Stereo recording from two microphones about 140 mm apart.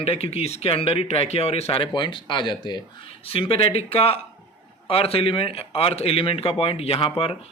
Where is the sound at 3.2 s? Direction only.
45° left (ahead or behind).